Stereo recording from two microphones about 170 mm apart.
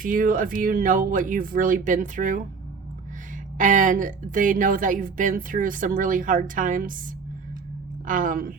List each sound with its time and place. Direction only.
0.0 s a woman's voice: 55° right (ahead or behind)
3.6 s a woman's voice: 50° right (ahead or behind)
8.0 s a woman's voice: 50° right (ahead or behind)